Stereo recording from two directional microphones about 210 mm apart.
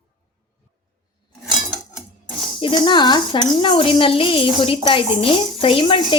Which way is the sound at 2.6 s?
20° left (ahead or behind).